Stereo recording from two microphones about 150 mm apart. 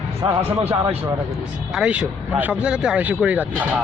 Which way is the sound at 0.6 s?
40° right (ahead or behind).